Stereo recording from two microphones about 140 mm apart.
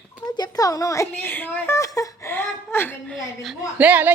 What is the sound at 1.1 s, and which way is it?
A woman's voice, 15° left (ahead or behind).